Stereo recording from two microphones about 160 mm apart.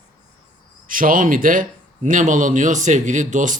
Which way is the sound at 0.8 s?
60° right (ahead or behind).